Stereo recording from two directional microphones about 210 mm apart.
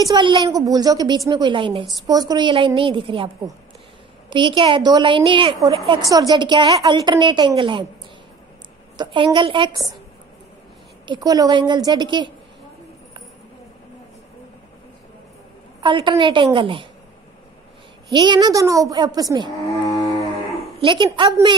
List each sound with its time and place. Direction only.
0.1 s a woman's voice: 20° right (ahead or behind)
8.9 s a woman's voice: 20° right (ahead or behind)
11.1 s a woman's voice: 20° right (ahead or behind)
15.8 s a woman's voice: 25° right (ahead or behind)
18.1 s a woman's voice: 20° right (ahead or behind)
19.7 s livestock: 15° left (ahead or behind)
20.8 s a woman's voice: 20° right (ahead or behind)